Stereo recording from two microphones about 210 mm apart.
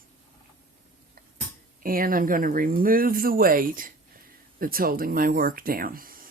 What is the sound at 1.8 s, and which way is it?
Speech, 40° right (ahead or behind).